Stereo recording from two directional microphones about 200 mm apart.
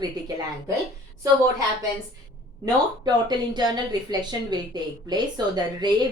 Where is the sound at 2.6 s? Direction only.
20° right (ahead or behind).